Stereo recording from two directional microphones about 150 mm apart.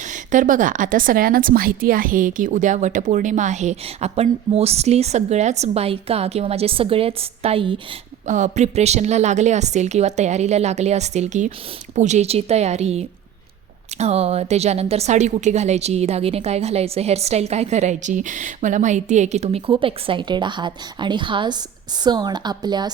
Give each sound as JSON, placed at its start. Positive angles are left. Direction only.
{"t": 0.0, "sound": "a woman's voice", "side_deg": -60}
{"t": 8.3, "sound": "a woman's voice", "side_deg": -55}